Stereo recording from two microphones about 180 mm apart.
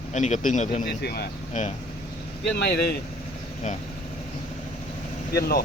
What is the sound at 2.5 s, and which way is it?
Speech, 65° left (ahead or behind).